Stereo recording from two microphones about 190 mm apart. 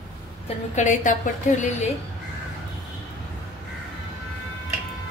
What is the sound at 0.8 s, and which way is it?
Speech, 40° left (ahead or behind).